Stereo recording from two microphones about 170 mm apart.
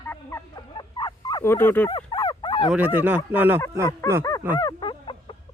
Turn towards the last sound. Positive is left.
turn(degrees=30)  # may be behind; listen again after turning